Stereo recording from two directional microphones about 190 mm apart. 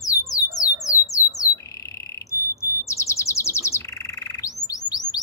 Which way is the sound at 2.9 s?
15° left (ahead or behind).